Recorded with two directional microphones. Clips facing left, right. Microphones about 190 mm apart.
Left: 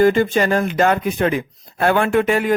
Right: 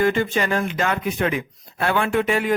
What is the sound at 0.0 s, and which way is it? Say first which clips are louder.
A man's voice: left 6 dB; 40° left (ahead or behind).